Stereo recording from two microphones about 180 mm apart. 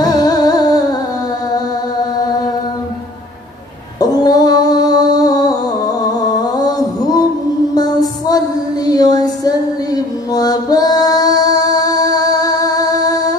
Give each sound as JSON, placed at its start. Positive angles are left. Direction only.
{"t": 0.0, "sound": "music", "side_deg": 20}
{"t": 4.0, "sound": "music", "side_deg": 20}